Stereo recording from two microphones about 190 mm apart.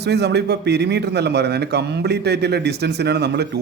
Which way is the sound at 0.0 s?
60° right (ahead or behind).